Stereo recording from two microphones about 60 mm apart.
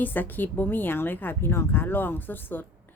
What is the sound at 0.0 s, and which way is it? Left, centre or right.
A woman's voice, left.